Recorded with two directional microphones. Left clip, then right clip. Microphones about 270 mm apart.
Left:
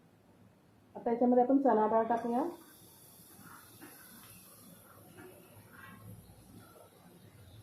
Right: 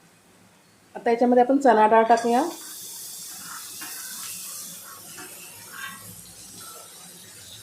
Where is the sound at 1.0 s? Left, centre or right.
Right.